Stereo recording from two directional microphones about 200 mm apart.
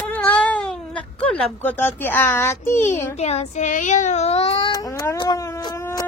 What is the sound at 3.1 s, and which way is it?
Speech, 35° left (ahead or behind).